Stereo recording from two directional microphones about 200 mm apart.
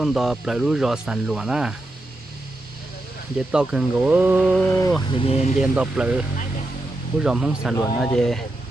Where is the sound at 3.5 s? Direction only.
5° right (ahead or behind).